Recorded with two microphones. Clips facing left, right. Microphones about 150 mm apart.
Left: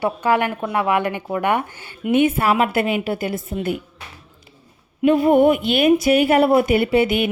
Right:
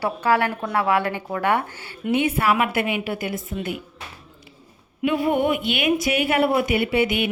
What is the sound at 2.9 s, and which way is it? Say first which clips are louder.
Speech: left 4 dB; 40° left (ahead or behind).